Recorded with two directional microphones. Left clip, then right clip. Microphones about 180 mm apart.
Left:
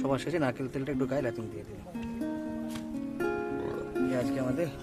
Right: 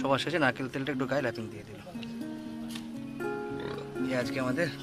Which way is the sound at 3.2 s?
Centre (ahead or behind).